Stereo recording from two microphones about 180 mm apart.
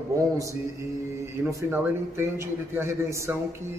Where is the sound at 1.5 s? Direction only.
15° right (ahead or behind).